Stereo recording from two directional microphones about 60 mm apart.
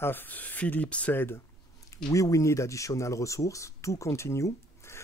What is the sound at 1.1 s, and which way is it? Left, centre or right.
Speech, left.